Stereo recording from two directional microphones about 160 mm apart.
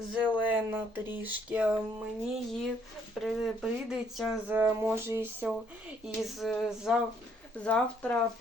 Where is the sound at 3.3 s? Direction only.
5° right (ahead or behind).